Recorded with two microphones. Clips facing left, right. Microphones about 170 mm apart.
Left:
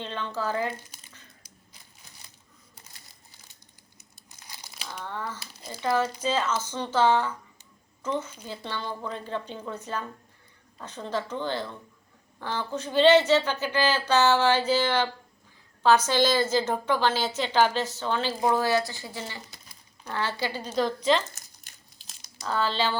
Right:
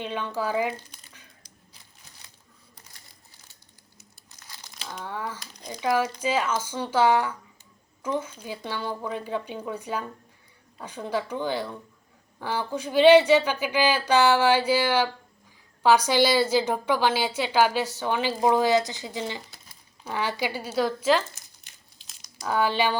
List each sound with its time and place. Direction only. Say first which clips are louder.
0.0 s a woman's voice: right 2 dB; 10° right (ahead or behind)
4.4 s crumpling: right 1 dB; 10° left (ahead or behind)
5.0 s a woman's voice: right 2 dB; 10° right (ahead or behind)
22.4 s a woman's voice: right 3 dB; 15° right (ahead or behind)